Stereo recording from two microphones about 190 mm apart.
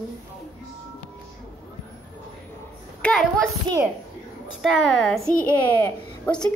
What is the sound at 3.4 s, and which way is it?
Speech, 15° right (ahead or behind).